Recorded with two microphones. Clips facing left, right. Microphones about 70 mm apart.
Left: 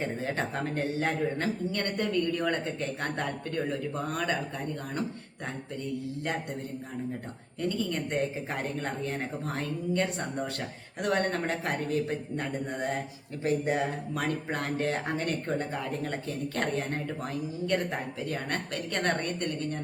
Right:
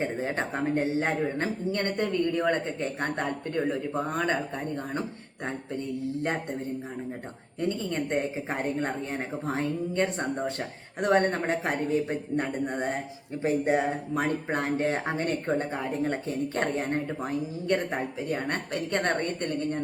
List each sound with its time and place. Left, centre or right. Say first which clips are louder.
0.0 s speech: right 2 dB; right
7.6 s speech: right 2 dB; right